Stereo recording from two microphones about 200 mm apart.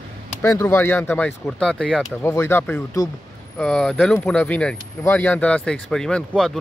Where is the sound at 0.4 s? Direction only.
15° left (ahead or behind).